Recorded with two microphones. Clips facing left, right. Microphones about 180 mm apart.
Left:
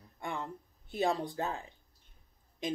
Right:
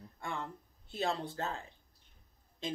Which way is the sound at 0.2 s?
15° left (ahead or behind).